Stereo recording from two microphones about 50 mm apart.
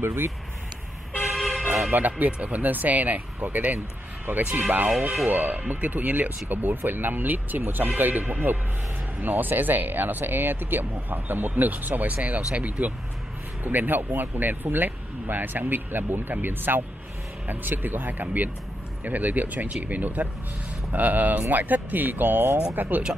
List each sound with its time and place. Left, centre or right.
0.0 s speech: right
1.3 s vehicle: centre
1.9 s speech: right
4.4 s speech: right
13.7 s speech: right